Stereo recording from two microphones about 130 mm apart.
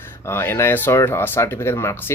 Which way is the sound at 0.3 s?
20° left (ahead or behind).